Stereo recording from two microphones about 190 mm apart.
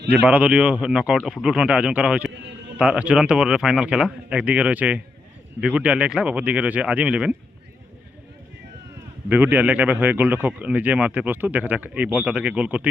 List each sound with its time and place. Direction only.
0.1 s a man's voice: 5° right (ahead or behind)
2.3 s a sound: 65° right (ahead or behind)
2.7 s a man's voice: 5° right (ahead or behind)
9.3 s a man's voice: 10° right (ahead or behind)